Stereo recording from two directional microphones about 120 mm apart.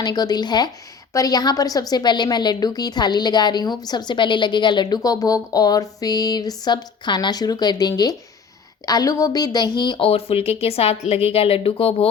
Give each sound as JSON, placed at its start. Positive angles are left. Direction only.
{"t": 0.0, "sound": "a woman's voice", "side_deg": 35}
{"t": 10.1, "sound": "speech", "side_deg": 55}